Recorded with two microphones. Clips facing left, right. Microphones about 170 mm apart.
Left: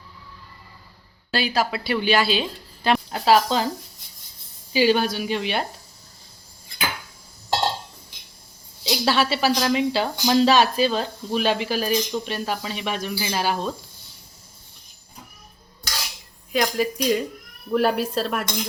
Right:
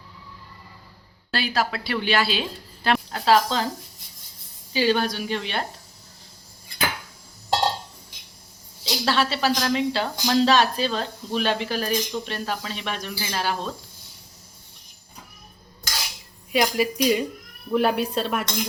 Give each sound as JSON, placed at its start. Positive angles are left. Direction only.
{"t": 1.3, "sound": "speech", "side_deg": 0}
{"t": 3.1, "sound": "speech", "side_deg": 15}
{"t": 4.7, "sound": "speech", "side_deg": 10}
{"t": 8.8, "sound": "speech", "side_deg": 10}
{"t": 16.5, "sound": "speech", "side_deg": -5}